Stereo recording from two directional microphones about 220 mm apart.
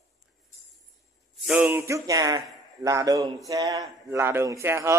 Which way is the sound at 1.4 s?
5° right (ahead or behind).